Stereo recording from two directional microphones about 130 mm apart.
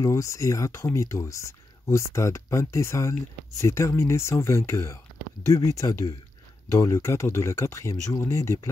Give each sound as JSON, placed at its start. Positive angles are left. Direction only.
{"t": 0.0, "sound": "speech", "side_deg": 25}